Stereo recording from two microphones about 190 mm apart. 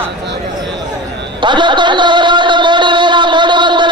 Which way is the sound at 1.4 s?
25° right (ahead or behind).